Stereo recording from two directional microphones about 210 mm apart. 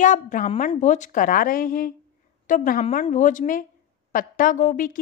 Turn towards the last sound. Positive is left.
turn(degrees=40)  # may be behind; listen again after turning